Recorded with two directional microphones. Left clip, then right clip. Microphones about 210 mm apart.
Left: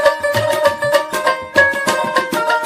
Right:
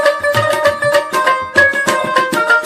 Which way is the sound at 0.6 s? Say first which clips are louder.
Right 2 dB; centre (ahead or behind).